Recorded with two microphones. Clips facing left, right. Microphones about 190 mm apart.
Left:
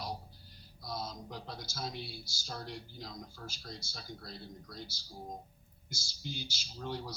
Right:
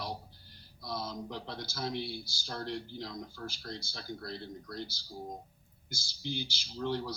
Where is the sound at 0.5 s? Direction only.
60° right (ahead or behind).